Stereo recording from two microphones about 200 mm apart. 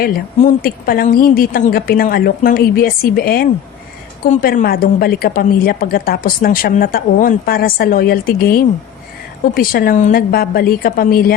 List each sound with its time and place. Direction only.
0.0 s a woman's voice: 45° left (ahead or behind)